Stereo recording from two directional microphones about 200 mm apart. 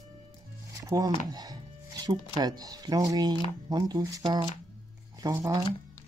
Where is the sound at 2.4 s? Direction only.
20° right (ahead or behind).